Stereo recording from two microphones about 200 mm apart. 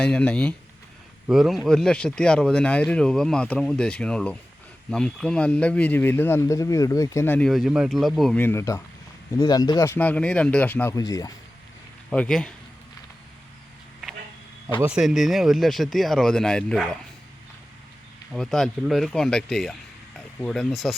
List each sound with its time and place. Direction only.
0.0 s speech: 5° left (ahead or behind)
12.1 s speech: 5° left (ahead or behind)
14.8 s speech: 5° right (ahead or behind)
18.3 s speech: centre (ahead or behind)